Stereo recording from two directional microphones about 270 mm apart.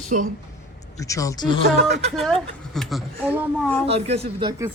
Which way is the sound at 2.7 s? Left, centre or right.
Centre.